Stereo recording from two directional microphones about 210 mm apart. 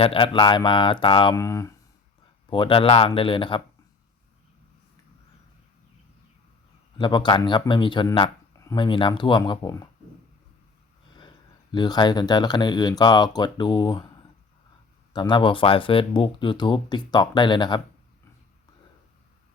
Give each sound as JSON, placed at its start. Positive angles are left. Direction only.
{"t": 0.0, "sound": "speech", "side_deg": 25}
{"t": 7.0, "sound": "speech", "side_deg": 20}
{"t": 11.7, "sound": "speech", "side_deg": 20}
{"t": 15.1, "sound": "speech", "side_deg": 20}